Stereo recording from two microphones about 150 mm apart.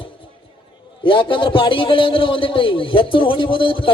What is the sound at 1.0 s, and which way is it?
A man's voice, 35° left (ahead or behind).